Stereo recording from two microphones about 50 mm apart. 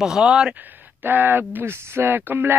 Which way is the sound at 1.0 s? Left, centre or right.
Right.